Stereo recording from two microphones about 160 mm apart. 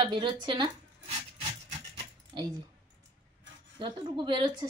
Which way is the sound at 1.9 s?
25° right (ahead or behind).